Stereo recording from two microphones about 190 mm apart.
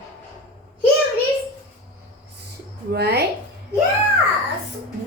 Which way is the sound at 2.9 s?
60° right (ahead or behind).